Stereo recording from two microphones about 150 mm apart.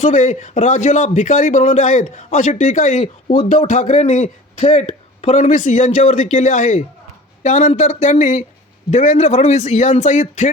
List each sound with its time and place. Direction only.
0.0 s a man's voice: 55° left (ahead or behind)